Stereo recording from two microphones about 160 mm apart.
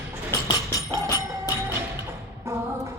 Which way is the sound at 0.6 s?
20° left (ahead or behind).